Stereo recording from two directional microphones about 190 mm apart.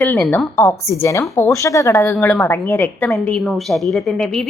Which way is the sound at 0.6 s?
15° left (ahead or behind).